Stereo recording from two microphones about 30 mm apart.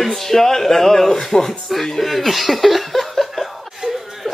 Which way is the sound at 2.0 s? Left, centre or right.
Centre.